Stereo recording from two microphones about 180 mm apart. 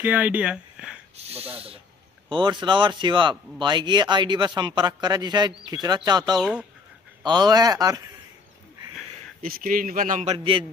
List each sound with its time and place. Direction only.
0.0 s speech: 10° right (ahead or behind)
1.1 s a man's voice: 35° right (ahead or behind); by 8.1 s 20° right (ahead or behind)
9.4 s a man's voice: 50° right (ahead or behind); by 10.6 s 30° right (ahead or behind)